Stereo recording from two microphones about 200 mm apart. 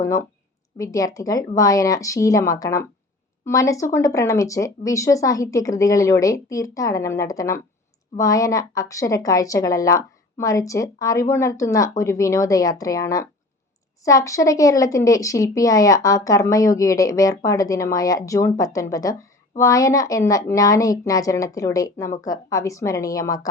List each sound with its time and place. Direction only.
0.0 s speech: 15° left (ahead or behind)